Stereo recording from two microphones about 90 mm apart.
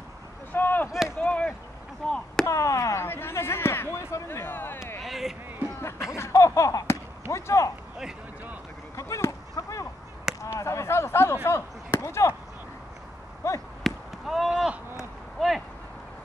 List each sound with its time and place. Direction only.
0.5 s a sound: 20° left (ahead or behind)
2.0 s speech: 10° left (ahead or behind)
2.4 s speech: 35° left (ahead or behind)
5.0 s speech: 5° right (ahead or behind)
5.8 s basketball bounce: 30° left (ahead or behind)
8.9 s a sound: 35° left (ahead or behind)
10.4 s speech: 35° left (ahead or behind)
13.4 s speech: 30° left (ahead or behind)
13.8 s a sound: centre (ahead or behind)
15.3 s speech: centre (ahead or behind)